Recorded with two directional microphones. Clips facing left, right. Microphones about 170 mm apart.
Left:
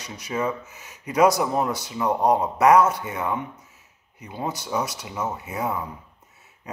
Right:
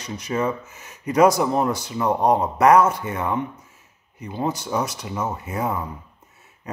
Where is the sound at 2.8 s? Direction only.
50° right (ahead or behind).